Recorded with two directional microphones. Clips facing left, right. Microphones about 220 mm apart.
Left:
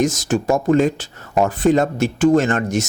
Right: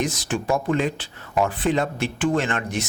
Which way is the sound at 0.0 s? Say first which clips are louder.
Left 7 dB; 45° left (ahead or behind).